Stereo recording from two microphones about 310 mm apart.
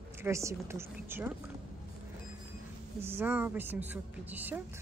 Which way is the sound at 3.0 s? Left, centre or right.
Centre.